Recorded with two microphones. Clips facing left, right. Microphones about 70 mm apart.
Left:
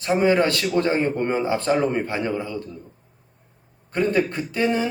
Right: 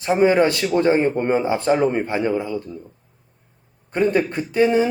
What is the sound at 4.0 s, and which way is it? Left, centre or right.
Speech, centre.